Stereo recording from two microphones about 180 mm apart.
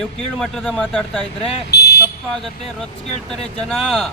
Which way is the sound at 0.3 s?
Centre (ahead or behind).